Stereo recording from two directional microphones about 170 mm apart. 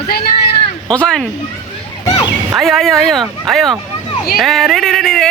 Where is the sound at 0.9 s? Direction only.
5° left (ahead or behind).